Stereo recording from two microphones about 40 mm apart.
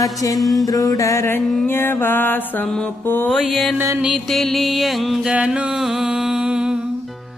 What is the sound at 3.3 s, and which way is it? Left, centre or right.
Music, centre.